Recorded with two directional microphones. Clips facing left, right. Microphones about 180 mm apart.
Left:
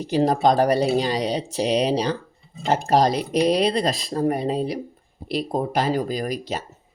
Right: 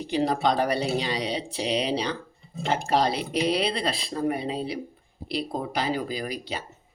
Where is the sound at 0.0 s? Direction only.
40° left (ahead or behind).